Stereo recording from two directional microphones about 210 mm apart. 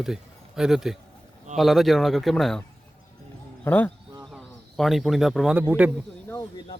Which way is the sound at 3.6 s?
10° left (ahead or behind).